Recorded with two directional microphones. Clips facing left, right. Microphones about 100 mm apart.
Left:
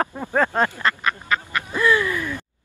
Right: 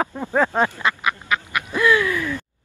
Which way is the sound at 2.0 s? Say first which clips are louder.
Right 2 dB; 15° left (ahead or behind).